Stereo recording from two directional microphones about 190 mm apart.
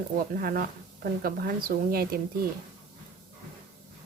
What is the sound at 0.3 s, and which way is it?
Speech, 50° right (ahead or behind).